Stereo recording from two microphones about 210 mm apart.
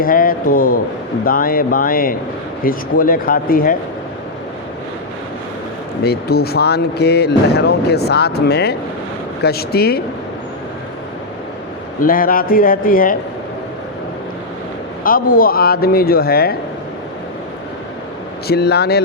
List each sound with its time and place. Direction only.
0.0 s a man's voice: 40° left (ahead or behind)
6.0 s speech: 50° left (ahead or behind)
12.0 s speech: 40° left (ahead or behind)
15.0 s speech: 40° left (ahead or behind)
18.4 s speech: 50° left (ahead or behind)